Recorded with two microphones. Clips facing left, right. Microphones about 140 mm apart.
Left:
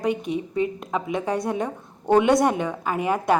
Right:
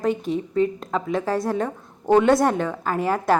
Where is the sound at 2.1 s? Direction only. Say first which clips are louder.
Right 1 dB; centre (ahead or behind).